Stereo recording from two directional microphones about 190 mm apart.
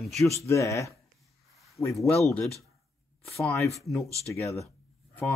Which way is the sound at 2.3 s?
Centre (ahead or behind).